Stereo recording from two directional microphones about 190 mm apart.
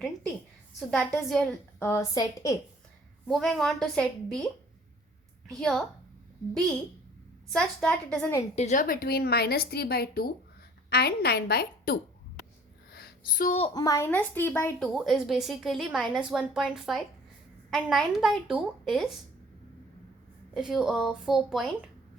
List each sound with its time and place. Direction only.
0.9 s a woman's voice: centre (ahead or behind)
1.8 s speech: 15° left (ahead or behind)
3.2 s a woman's voice: centre (ahead or behind)
5.5 s a woman's voice: centre (ahead or behind)
7.5 s a woman's voice: 5° left (ahead or behind)
8.5 s a woman's voice: 40° left (ahead or behind); by 11.9 s 55° left (ahead or behind)
12.9 s a sound: 55° left (ahead or behind)
13.6 s speech: 20° left (ahead or behind)
14.8 s a woman's voice: centre (ahead or behind)
20.5 s a woman's voice: centre (ahead or behind)